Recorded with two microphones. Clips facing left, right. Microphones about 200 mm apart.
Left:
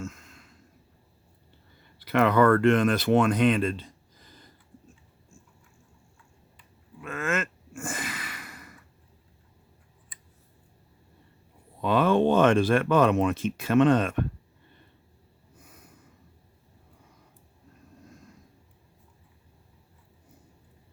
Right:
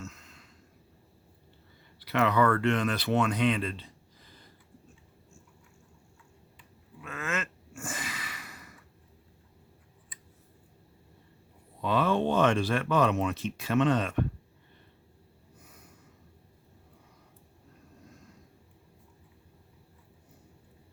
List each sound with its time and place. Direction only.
0.0 s a sound: 50° left (ahead or behind)
2.0 s speech: 50° left (ahead or behind)
7.0 s gasp: 50° left (ahead or behind)
11.8 s speech: 55° left (ahead or behind)